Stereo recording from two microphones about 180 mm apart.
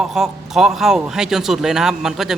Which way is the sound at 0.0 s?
Centre (ahead or behind).